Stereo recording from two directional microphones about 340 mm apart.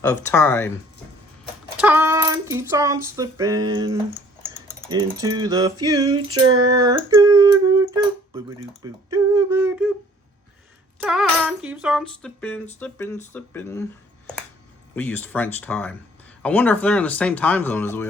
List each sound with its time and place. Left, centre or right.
0.0 s speech: centre
1.7 s a sound: centre
4.9 s speech: centre
6.2 s female singing: right
6.7 s speech: centre
11.0 s speech: centre
14.9 s speech: centre